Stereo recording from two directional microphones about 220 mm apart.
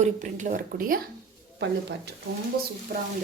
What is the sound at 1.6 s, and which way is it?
Speech, 50° right (ahead or behind).